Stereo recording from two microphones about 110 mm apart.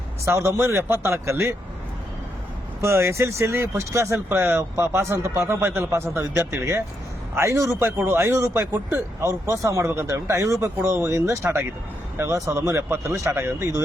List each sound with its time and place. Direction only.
0.3 s speech: 25° right (ahead or behind)
2.8 s speech: 25° right (ahead or behind)